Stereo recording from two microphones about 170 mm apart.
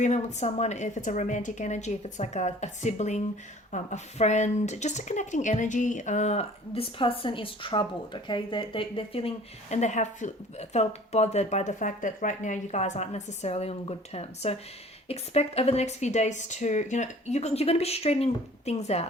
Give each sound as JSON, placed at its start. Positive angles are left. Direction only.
{"t": 0.0, "sound": "speech", "side_deg": 45}